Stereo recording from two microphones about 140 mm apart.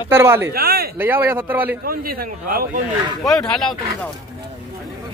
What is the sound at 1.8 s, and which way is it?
Speech, 90° right.